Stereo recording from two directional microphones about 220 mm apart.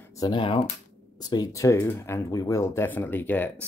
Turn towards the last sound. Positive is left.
turn(degrees=10)  # may be behind; listen again after turning